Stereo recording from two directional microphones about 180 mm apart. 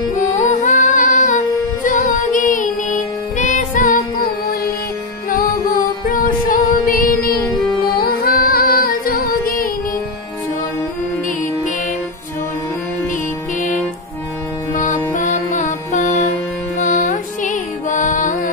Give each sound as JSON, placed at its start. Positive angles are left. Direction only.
{"t": 0.1, "sound": "music", "side_deg": 45}
{"t": 6.0, "sound": "music", "side_deg": 50}
{"t": 14.7, "sound": "music", "side_deg": 45}